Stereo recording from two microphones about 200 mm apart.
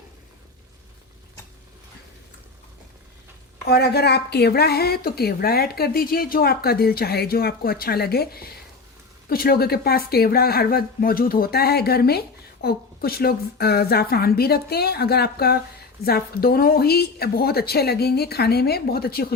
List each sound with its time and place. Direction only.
3.7 s a woman's voice: 55° left (ahead or behind)